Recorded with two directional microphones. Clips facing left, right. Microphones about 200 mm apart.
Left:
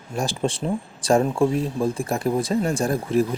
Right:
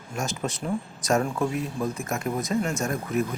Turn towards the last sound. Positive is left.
turn(degrees=30)  # may be behind; listen again after turning